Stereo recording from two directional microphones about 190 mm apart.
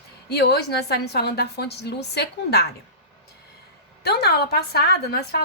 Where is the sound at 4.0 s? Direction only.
60° left (ahead or behind).